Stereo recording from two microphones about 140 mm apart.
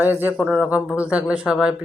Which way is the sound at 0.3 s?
5° right (ahead or behind).